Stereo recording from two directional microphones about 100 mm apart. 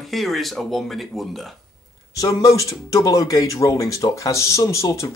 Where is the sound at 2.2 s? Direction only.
35° left (ahead or behind).